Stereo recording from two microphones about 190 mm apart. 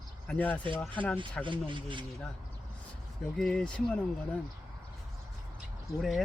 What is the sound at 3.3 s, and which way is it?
Speech, 5° left (ahead or behind).